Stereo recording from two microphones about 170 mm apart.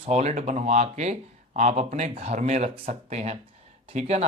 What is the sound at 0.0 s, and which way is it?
Mantra, 40° right (ahead or behind).